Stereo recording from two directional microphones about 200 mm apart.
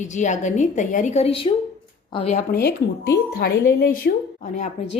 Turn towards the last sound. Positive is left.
turn(degrees=40)  # may be behind; listen again after turning